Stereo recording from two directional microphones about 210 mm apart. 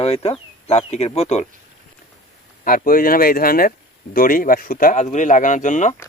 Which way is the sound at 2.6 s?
40° left (ahead or behind).